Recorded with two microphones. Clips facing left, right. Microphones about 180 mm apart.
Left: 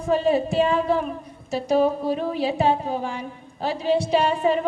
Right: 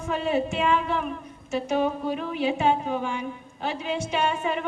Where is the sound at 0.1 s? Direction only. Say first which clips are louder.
Left 5 dB; 35° left (ahead or behind).